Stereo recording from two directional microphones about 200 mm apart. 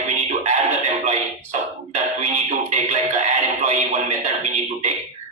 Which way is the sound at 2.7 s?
35° right (ahead or behind).